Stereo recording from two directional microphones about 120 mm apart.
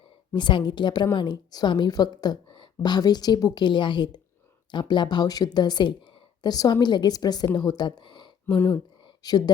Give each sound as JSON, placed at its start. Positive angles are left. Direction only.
{"t": 0.3, "sound": "a woman's voice", "side_deg": 40}
{"t": 8.4, "sound": "speech", "side_deg": 15}
{"t": 8.7, "sound": "a sound", "side_deg": 40}